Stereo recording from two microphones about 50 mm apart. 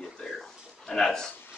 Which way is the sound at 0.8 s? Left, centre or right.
Centre.